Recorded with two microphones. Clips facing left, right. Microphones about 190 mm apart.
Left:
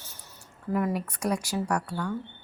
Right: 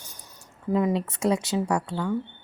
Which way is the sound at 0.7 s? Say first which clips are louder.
Right 4 dB; 20° right (ahead or behind).